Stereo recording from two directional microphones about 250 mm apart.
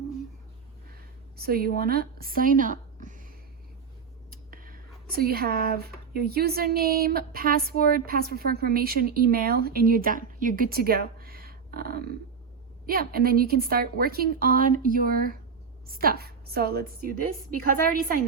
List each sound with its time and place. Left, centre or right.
1.4 s speech: right
4.5 s speech: right